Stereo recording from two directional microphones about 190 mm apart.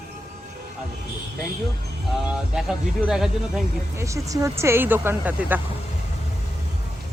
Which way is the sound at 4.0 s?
15° right (ahead or behind).